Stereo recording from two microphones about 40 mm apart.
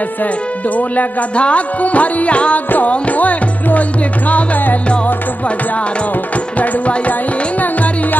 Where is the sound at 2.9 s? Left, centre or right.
Left.